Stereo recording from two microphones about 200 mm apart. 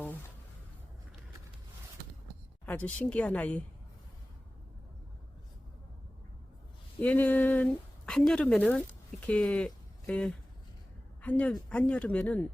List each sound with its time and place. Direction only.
0.0 s music: 10° left (ahead or behind)
2.6 s speech: 5° left (ahead or behind)
7.0 s speech: 10° left (ahead or behind)